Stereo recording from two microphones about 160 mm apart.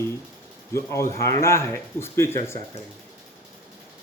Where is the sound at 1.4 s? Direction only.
15° left (ahead or behind).